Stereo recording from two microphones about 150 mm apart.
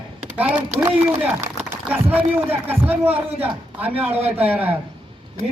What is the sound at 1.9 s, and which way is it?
A man's voice, 10° right (ahead or behind).